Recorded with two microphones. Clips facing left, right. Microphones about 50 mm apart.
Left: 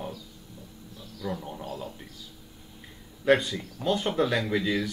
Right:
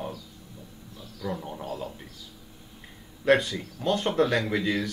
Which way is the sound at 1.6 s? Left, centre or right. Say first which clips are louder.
Right 2 dB; right.